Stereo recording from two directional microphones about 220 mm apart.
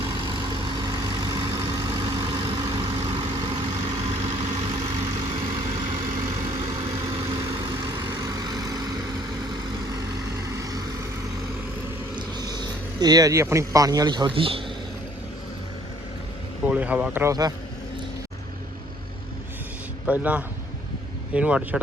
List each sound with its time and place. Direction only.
0.3 s vehicle: 20° right (ahead or behind)
7.0 s vehicle: 20° right (ahead or behind)
10.5 s vehicle: 15° right (ahead or behind)
12.1 s speech: 20° right (ahead or behind)
16.6 s a sound: 5° right (ahead or behind)
20.1 s speech: 5° right (ahead or behind)
21.3 s speech: 5° right (ahead or behind)